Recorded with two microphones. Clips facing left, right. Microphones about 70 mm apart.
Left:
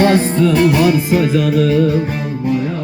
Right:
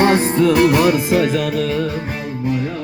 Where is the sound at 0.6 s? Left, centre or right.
Right.